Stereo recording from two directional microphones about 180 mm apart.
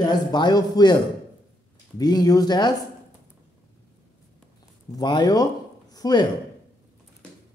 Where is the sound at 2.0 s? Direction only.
20° left (ahead or behind).